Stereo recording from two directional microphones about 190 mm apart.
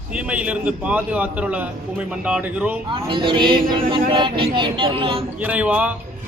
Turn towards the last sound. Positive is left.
turn(degrees=-5)  # may be behind; listen again after turning